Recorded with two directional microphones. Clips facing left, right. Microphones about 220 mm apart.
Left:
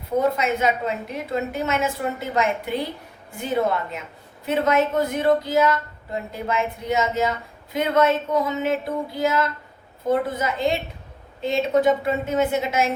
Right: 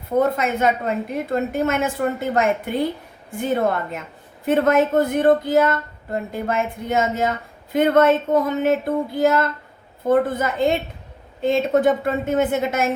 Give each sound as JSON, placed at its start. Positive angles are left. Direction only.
{"t": 0.2, "sound": "a woman's voice", "side_deg": -50}